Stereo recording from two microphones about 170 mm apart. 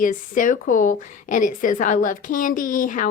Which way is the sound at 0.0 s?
50° left (ahead or behind).